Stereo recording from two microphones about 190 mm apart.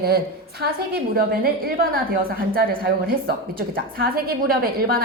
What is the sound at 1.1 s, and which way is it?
A woman's voice, 50° right (ahead or behind).